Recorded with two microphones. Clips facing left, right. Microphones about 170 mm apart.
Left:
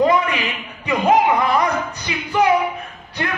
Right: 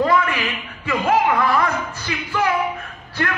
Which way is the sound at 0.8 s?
20° left (ahead or behind).